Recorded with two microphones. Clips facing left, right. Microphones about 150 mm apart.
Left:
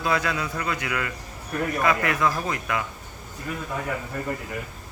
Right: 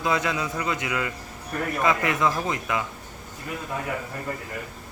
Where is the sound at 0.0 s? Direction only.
20° right (ahead or behind).